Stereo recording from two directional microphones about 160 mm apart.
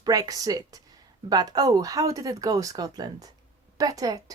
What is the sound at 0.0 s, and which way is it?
Speech, 20° right (ahead or behind).